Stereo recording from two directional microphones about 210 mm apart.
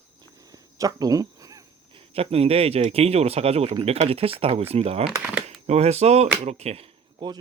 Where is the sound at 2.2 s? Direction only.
30° right (ahead or behind).